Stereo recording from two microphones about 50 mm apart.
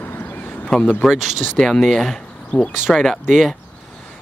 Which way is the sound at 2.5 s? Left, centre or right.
Left.